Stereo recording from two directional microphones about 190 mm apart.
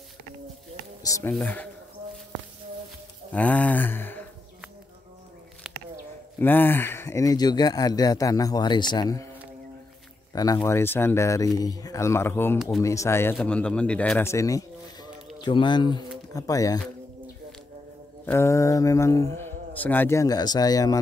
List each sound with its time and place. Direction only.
1.0 s speech: 15° left (ahead or behind)
3.3 s a sound: 5° left (ahead or behind)
6.4 s speech: 10° left (ahead or behind)
10.3 s speech: 20° left (ahead or behind)
18.2 s speech: 15° left (ahead or behind)